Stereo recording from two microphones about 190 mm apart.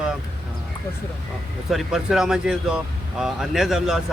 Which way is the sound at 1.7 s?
Centre (ahead or behind).